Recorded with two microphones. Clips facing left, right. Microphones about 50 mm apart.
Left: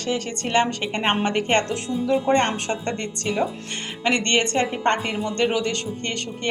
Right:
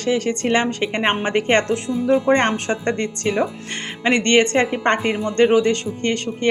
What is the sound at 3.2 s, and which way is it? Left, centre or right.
Speech, right.